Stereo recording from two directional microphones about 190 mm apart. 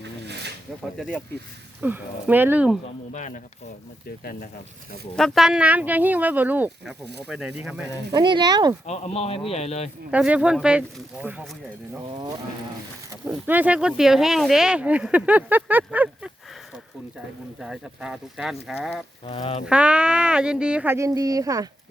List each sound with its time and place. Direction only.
0.0 s snake: 65° right (ahead or behind)
1.8 s speech: 10° right (ahead or behind)
3.1 s speech: 40° left (ahead or behind)
4.2 s speech: 50° left (ahead or behind)
5.1 s speech: centre (ahead or behind)
8.1 s speech: 25° right (ahead or behind)
8.9 s speech: 35° left (ahead or behind)
10.1 s speech: 5° right (ahead or behind)
13.2 s speech: 10° right (ahead or behind)
17.6 s speech: 5° right (ahead or behind)
19.2 s speech: 30° left (ahead or behind)
19.6 s speech: 5° right (ahead or behind)